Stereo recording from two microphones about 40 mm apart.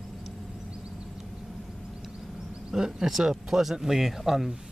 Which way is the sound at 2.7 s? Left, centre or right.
Centre.